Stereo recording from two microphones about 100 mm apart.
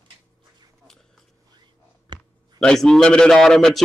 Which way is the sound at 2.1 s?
50° right (ahead or behind).